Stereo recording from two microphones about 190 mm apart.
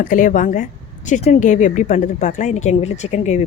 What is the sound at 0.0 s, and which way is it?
A woman's voice, 45° left (ahead or behind).